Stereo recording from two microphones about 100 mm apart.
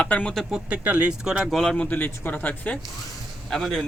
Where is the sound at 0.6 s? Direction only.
15° right (ahead or behind).